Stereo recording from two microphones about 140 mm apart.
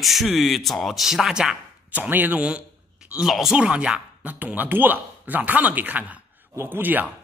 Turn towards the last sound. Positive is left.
turn(degrees=-15)  # may be behind; listen again after turning